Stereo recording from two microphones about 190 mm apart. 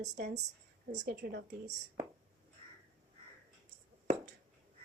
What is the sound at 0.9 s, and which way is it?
Speech, 50° right (ahead or behind).